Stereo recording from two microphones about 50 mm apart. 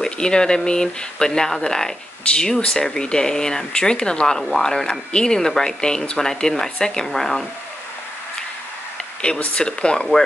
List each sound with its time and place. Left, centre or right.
0.0 s speech: centre
4.4 s speech: centre
9.2 s speech: centre